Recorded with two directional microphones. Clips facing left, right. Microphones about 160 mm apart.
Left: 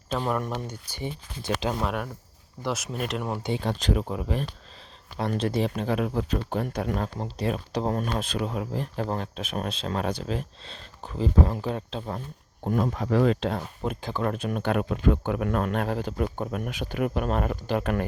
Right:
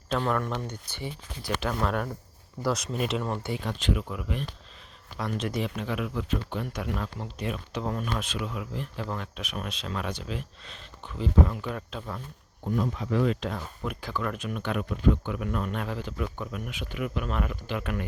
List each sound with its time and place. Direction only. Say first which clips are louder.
0.1 s speech: even; 15° left (ahead or behind)
1.8 s speech: right 1 dB; 5° left (ahead or behind)
3.2 s speech: left 1 dB; 10° left (ahead or behind)
3.5 s speech: left 6 dB; 35° left (ahead or behind)
12.7 s speech: left 3 dB; 55° left (ahead or behind)
13.4 s speech: left 4 dB; 30° left (ahead or behind)
15.2 s speech: left 5 dB; 55° left (ahead or behind)
15.7 s speech: left 5 dB; 45° left (ahead or behind)